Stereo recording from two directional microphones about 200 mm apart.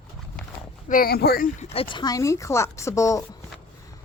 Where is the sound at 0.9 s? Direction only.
50° left (ahead or behind).